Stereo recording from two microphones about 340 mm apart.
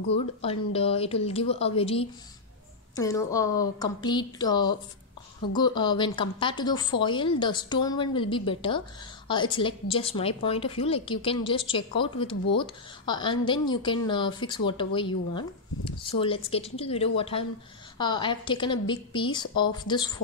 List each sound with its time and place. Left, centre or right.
0.1 s speech: centre